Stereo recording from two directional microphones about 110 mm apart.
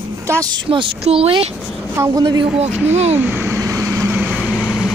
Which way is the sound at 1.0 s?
60° right (ahead or behind).